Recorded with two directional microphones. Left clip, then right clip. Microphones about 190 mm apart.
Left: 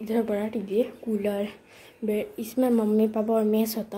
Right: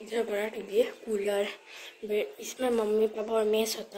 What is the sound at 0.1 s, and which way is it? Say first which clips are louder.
Speech: left 3 dB; 15° left (ahead or behind).